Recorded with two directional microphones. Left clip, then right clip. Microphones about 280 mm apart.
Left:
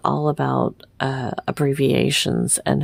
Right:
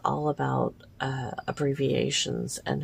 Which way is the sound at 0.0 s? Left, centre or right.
Left.